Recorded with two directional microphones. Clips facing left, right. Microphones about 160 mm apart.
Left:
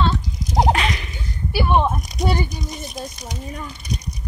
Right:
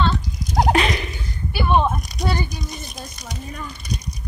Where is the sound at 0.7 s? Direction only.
35° right (ahead or behind).